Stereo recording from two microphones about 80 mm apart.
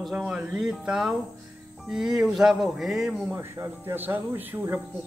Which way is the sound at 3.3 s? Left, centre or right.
Right.